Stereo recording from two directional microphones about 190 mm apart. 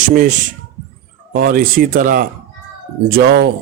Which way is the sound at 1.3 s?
50° right (ahead or behind).